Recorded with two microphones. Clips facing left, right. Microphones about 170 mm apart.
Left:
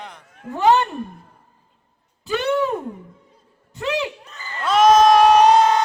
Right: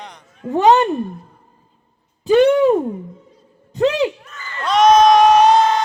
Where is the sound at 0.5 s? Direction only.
20° right (ahead or behind).